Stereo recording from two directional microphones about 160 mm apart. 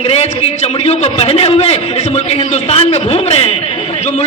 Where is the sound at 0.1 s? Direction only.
40° left (ahead or behind).